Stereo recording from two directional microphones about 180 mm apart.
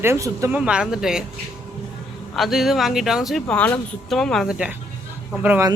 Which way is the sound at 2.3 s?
Centre (ahead or behind).